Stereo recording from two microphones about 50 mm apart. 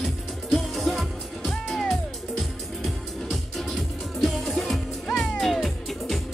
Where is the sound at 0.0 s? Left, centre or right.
Centre.